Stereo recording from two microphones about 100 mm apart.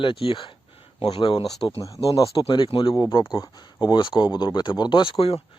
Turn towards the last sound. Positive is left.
turn(degrees=70)  # may be behind; listen again after turning